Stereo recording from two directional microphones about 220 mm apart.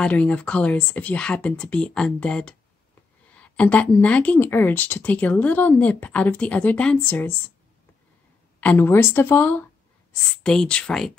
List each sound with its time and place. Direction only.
0.0 s speech: 5° left (ahead or behind)
8.5 s speech: 10° left (ahead or behind)